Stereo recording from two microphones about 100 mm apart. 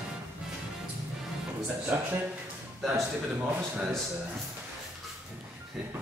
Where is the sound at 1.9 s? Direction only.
15° right (ahead or behind).